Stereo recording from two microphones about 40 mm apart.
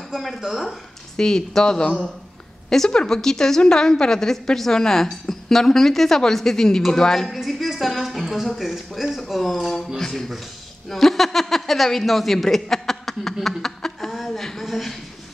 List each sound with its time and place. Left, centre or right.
0.1 s speech: centre
1.1 s a woman's voice: centre
2.9 s a woman's voice: left
7.3 s a sound: centre
9.3 s a woman's voice: centre
14.1 s a sound: centre